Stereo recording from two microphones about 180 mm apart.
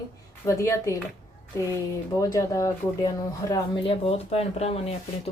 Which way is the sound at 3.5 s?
30° left (ahead or behind).